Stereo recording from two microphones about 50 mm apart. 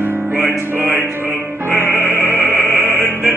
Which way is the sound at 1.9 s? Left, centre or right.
Right.